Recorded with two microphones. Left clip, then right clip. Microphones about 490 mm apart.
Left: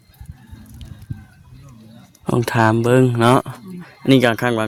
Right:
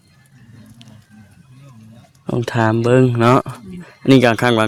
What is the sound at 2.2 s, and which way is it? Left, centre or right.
Speech, left.